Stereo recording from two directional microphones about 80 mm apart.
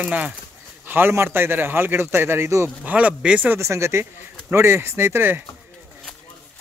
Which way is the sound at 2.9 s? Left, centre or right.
Centre.